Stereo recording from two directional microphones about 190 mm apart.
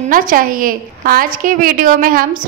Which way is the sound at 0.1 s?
45° right (ahead or behind).